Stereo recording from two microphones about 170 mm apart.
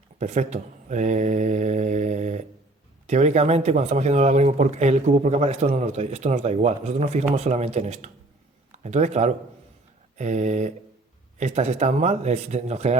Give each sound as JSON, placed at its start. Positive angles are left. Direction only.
{"t": 0.2, "sound": "speech", "side_deg": -45}